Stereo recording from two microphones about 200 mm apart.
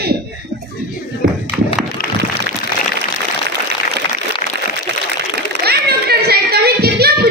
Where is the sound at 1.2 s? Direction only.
55° right (ahead or behind).